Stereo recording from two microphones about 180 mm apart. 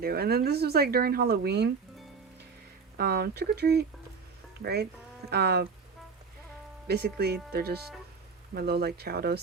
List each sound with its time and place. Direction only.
0.0 s speech: 60° right (ahead or behind)
3.0 s speech: 60° right (ahead or behind)
6.8 s speech: 65° right (ahead or behind)